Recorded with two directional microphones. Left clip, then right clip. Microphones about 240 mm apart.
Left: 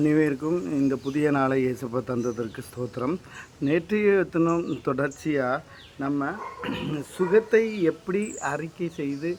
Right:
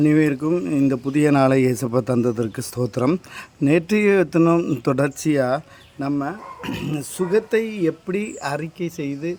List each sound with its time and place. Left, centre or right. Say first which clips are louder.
0.0 s speech: right 5 dB; right